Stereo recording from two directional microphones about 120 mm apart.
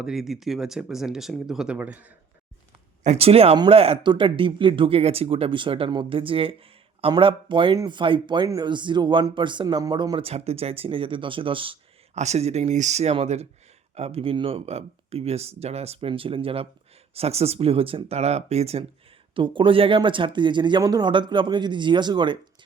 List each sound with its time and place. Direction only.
0.0 s speech: 5° right (ahead or behind)
3.0 s speech: 65° right (ahead or behind); by 10.2 s 40° right (ahead or behind)
10.2 s speech: 60° right (ahead or behind)
12.1 s speech: 70° right (ahead or behind)
19.3 s speech: 45° right (ahead or behind)